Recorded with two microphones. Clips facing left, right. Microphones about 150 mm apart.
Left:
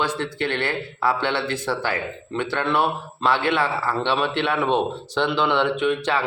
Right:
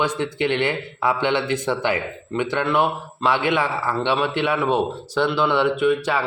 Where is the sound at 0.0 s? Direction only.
15° right (ahead or behind).